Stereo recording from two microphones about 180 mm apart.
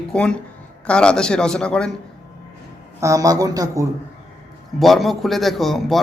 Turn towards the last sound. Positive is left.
turn(degrees=0)  # may be behind; listen again after turning